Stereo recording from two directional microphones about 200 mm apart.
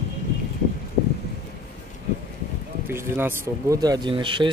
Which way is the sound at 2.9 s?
10° right (ahead or behind).